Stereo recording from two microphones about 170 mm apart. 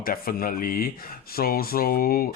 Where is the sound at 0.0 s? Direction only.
60° left (ahead or behind).